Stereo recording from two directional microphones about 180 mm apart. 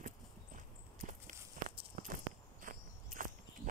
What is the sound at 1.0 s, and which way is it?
Walk, 50° right (ahead or behind).